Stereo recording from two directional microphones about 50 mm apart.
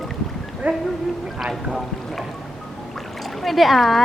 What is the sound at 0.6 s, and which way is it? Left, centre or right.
Speech, right.